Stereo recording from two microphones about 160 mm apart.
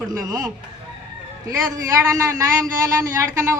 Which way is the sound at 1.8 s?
20° right (ahead or behind).